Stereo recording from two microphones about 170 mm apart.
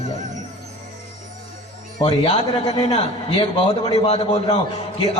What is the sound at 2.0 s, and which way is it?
A man's voice, 35° left (ahead or behind).